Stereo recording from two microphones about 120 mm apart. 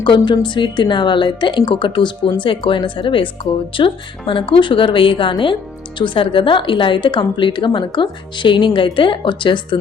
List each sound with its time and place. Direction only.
0.4 s a woman's voice: 40° left (ahead or behind)